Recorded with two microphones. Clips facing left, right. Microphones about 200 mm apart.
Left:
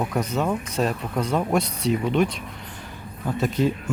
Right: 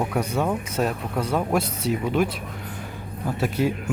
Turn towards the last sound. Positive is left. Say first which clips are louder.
# left 1 dB
turn(degrees=-10)  # may be behind; listen again after turning